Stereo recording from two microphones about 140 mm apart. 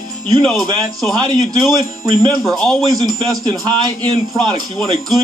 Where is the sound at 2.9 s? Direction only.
30° right (ahead or behind).